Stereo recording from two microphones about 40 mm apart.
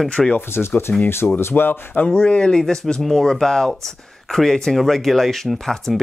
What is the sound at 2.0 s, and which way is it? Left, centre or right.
Speech, left.